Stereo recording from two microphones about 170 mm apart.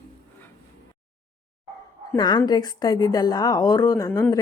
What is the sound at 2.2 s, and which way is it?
Speech, 25° left (ahead or behind).